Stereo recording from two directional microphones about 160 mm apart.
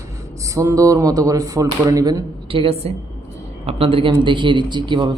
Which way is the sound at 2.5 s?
35° right (ahead or behind).